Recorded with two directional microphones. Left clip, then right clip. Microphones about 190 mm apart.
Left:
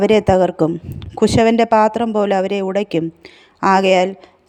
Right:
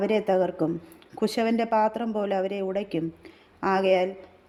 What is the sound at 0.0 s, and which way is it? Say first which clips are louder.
Speech: left 11 dB; 35° left (ahead or behind).